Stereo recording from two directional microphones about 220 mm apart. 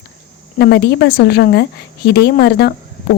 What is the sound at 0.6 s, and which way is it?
Speech, 50° left (ahead or behind).